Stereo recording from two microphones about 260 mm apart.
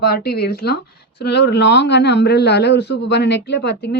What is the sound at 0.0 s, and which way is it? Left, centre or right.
Speech, left.